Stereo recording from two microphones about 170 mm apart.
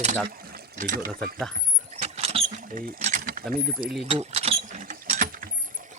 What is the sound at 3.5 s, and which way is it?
Speech, 60° right (ahead or behind).